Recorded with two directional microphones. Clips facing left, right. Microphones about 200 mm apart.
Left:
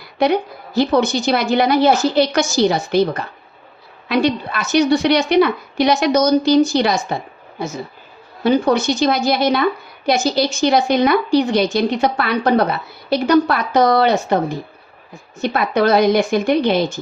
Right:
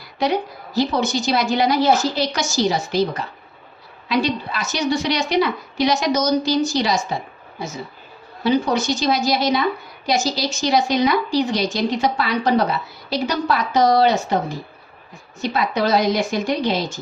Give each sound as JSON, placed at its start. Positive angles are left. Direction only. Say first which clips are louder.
{"t": 0.2, "sound": "a woman's voice", "louder": "left 4 dB", "side_deg": 60}
{"t": 8.4, "sound": "a woman's voice", "louder": "left 4 dB", "side_deg": 55}
{"t": 15.4, "sound": "a woman's voice", "louder": "left 4 dB", "side_deg": 55}